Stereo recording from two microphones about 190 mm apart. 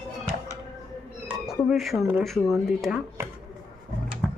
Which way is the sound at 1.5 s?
Centre (ahead or behind).